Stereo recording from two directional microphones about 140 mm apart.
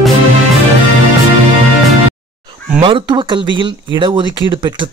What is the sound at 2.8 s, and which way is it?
Speech, 35° right (ahead or behind).